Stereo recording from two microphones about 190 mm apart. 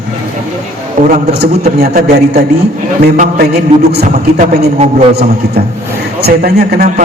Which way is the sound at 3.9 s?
55° right (ahead or behind).